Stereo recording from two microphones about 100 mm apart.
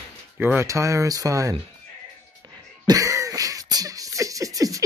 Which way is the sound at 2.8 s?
35° right (ahead or behind).